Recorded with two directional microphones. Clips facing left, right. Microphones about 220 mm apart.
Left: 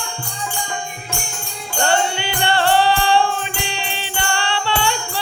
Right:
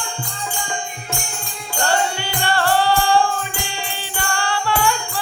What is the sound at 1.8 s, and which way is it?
Music, 25° left (ahead or behind).